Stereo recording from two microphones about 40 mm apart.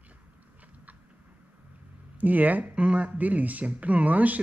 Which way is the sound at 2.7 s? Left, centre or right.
Right.